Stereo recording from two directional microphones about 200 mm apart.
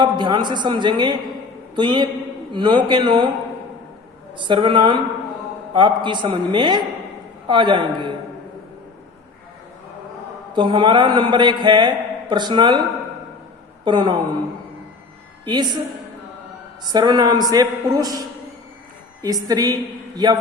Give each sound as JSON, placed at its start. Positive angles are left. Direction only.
{"t": 0.0, "sound": "a man's voice", "side_deg": -25}
{"t": 4.4, "sound": "a man's voice", "side_deg": -25}
{"t": 10.5, "sound": "a man's voice", "side_deg": -25}
{"t": 13.8, "sound": "a man's voice", "side_deg": -25}
{"t": 15.4, "sound": "a man's voice", "side_deg": -20}
{"t": 16.8, "sound": "a man's voice", "side_deg": -20}